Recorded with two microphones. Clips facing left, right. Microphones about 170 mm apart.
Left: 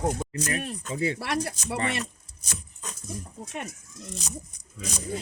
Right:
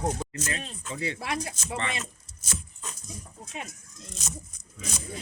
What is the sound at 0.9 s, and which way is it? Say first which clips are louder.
Speech: left 4 dB; 40° left (ahead or behind).